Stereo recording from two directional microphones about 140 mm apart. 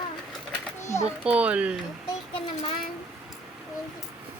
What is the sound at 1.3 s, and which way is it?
Speech, 10° right (ahead or behind).